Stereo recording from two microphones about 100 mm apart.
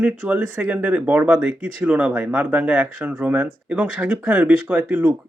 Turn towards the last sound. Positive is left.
turn(degrees=-15)  # may be behind; listen again after turning